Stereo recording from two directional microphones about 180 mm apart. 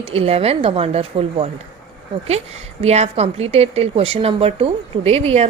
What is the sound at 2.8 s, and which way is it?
A woman's voice, 35° right (ahead or behind).